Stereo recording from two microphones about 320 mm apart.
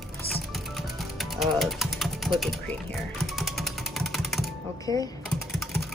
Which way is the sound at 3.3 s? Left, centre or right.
Centre.